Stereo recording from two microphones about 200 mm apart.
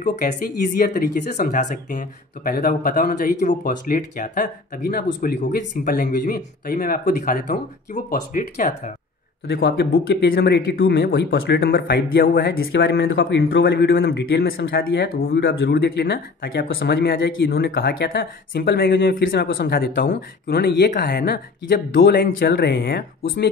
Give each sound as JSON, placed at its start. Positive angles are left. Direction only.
{"t": 0.0, "sound": "speech", "side_deg": 40}
{"t": 9.5, "sound": "speech", "side_deg": 55}